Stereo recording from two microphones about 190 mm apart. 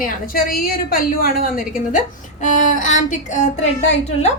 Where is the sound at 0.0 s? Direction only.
45° left (ahead or behind).